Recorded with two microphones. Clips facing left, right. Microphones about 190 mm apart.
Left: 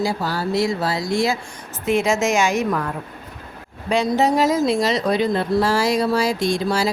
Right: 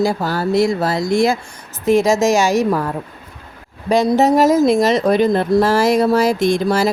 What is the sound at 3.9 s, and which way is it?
Speech, 40° right (ahead or behind).